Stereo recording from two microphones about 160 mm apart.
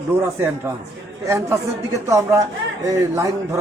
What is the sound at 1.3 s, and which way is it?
A man's voice, 20° right (ahead or behind).